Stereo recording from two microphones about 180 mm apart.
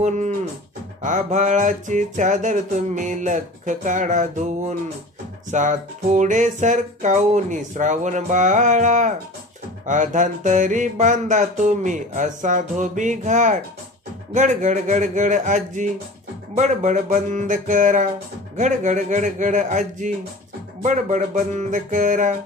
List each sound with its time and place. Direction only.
0.0 s cattle: 40° right (ahead or behind)
1.0 s music: 45° right (ahead or behind)
5.5 s music: 45° right (ahead or behind)